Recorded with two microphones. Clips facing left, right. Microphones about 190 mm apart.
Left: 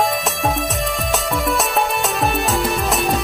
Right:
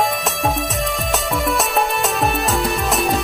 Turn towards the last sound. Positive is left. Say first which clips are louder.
# even
turn(degrees=0)  # may be behind; listen again after turning